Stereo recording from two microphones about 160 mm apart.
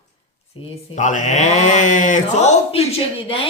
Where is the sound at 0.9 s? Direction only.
50° left (ahead or behind).